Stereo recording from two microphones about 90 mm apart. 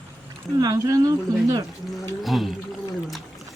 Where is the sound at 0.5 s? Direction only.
40° right (ahead or behind).